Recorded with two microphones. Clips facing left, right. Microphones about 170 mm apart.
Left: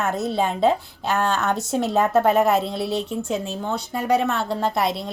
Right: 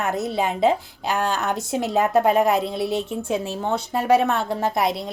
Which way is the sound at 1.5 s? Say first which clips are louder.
Left 1 dB; centre (ahead or behind).